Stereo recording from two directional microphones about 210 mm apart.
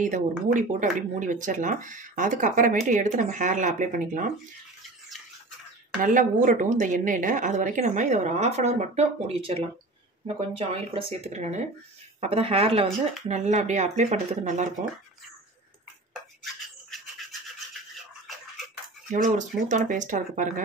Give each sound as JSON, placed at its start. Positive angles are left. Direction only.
{"t": 0.0, "sound": "a woman's voice", "side_deg": -35}
{"t": 6.0, "sound": "a woman's voice", "side_deg": -40}
{"t": 19.0, "sound": "a woman's voice", "side_deg": -35}